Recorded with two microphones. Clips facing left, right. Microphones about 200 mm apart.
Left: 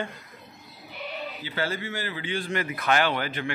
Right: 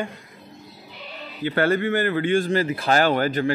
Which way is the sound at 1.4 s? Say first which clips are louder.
Right 12 dB; 55° right (ahead or behind).